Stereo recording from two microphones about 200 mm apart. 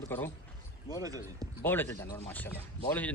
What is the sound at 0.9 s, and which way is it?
Speech, 20° right (ahead or behind).